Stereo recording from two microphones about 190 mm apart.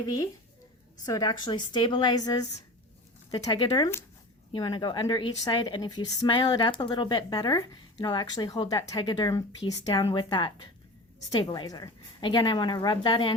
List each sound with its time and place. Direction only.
1.0 s a woman's voice: 20° left (ahead or behind)